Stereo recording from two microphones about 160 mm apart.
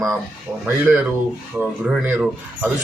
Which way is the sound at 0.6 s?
10° right (ahead or behind).